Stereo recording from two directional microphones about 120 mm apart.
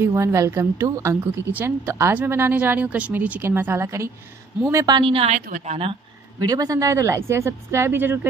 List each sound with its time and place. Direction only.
0.0 s a woman's voice: 25° right (ahead or behind)
4.9 s a woman's voice: 45° right (ahead or behind)
5.3 s a woman's voice: 75° right (ahead or behind); by 5.9 s 55° right (ahead or behind)
6.4 s a woman's voice: 30° right (ahead or behind)